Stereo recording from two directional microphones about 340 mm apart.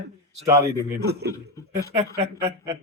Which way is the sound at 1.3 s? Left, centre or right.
Centre.